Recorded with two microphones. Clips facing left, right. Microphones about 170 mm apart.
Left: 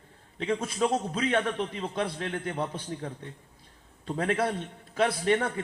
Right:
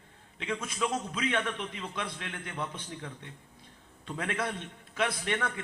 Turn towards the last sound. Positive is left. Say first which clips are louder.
# left 7 dB
turn(degrees=35)  # may be behind; listen again after turning